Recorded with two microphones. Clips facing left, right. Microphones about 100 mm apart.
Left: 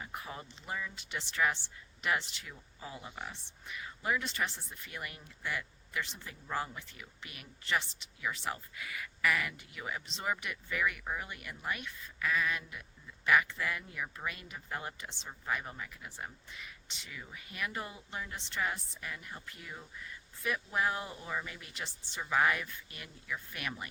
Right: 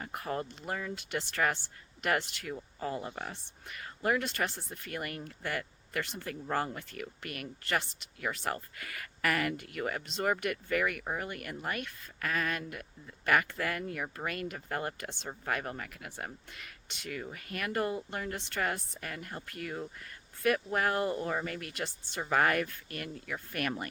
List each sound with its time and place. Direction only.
0.0 s speech: 55° right (ahead or behind)